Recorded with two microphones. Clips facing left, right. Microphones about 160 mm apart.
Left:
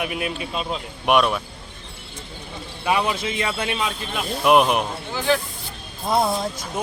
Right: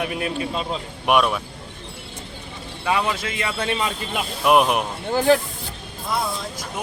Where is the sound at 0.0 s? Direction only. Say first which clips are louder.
Right 2 dB; 10° left (ahead or behind).